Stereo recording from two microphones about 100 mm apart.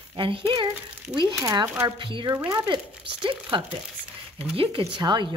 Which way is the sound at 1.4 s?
40° right (ahead or behind).